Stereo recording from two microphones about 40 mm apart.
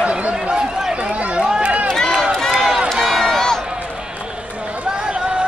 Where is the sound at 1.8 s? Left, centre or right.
Centre.